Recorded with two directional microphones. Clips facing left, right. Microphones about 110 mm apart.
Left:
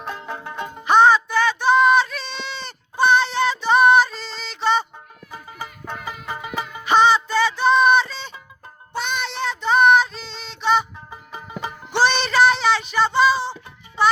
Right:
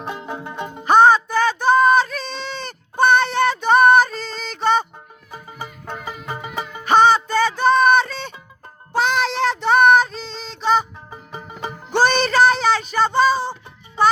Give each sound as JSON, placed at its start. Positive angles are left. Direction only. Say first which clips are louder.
{"t": 0.0, "sound": "music", "louder": "right 2 dB", "side_deg": -15}
{"t": 0.9, "sound": "a sound", "louder": "right 2 dB", "side_deg": -45}
{"t": 5.9, "sound": "music", "louder": "right 1 dB", "side_deg": -20}
{"t": 6.8, "sound": "music", "louder": "right 2 dB", "side_deg": -45}
{"t": 8.9, "sound": "child singing", "louder": "right 7 dB", "side_deg": -90}
{"t": 11.1, "sound": "music", "louder": "even", "side_deg": -25}
{"t": 11.9, "sound": "music", "louder": "right 2 dB", "side_deg": -45}